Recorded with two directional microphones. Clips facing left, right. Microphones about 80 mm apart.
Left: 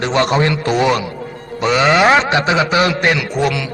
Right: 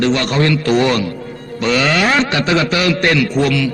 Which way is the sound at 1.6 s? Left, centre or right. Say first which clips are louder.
Left 3 dB; left.